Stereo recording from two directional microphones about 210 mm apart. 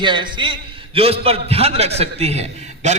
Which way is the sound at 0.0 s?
20° right (ahead or behind).